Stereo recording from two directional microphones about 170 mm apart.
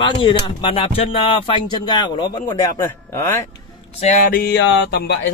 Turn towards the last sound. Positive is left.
turn(degrees=85)